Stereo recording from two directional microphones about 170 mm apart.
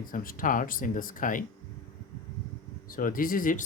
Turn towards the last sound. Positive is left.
turn(degrees=50)  # may be behind; listen again after turning